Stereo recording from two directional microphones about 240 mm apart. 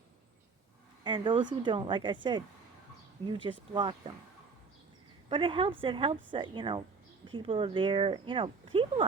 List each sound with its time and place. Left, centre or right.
1.0 s speech: centre
3.2 s speech: right
5.3 s speech: right